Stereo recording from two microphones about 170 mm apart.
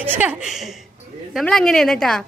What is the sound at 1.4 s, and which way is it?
Speech, 5° left (ahead or behind).